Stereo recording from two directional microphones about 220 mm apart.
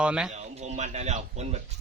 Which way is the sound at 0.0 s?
5° right (ahead or behind).